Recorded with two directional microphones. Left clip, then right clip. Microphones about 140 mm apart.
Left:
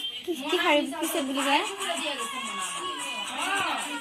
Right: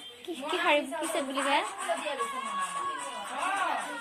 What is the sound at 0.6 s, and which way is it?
A woman's voice, 25° left (ahead or behind).